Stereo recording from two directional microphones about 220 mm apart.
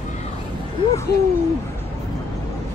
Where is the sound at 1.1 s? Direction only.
45° left (ahead or behind).